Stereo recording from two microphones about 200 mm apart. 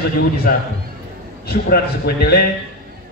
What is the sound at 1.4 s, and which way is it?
A man's voice, 50° left (ahead or behind).